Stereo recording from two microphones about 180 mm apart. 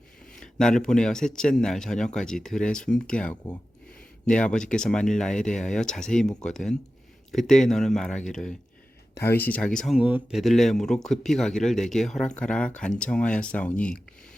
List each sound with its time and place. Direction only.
0.3 s a man's voice: 5° left (ahead or behind)